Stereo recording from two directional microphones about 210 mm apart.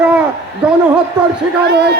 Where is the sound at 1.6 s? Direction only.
50° right (ahead or behind).